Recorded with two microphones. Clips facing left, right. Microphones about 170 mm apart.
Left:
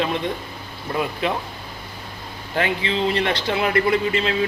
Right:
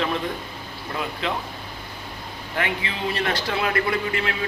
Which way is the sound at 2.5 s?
30° left (ahead or behind).